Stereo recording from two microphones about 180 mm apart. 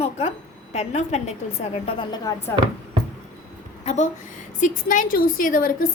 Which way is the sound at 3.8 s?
40° left (ahead or behind).